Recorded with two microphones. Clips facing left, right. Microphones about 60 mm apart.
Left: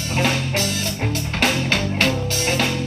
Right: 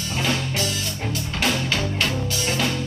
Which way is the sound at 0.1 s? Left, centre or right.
Left.